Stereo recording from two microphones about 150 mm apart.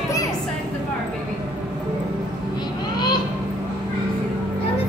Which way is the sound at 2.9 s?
30° left (ahead or behind).